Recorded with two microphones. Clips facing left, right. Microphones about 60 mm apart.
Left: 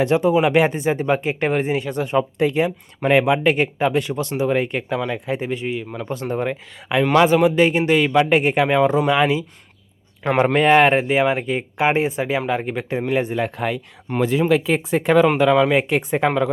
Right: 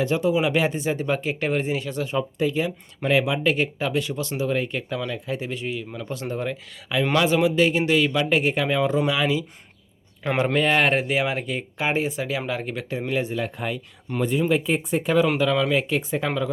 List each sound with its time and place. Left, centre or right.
0.0 s speech: left
5.4 s speech: left
7.4 s speech: left
11.8 s speech: left
13.6 s speech: left
14.2 s speech: left
15.4 s speech: left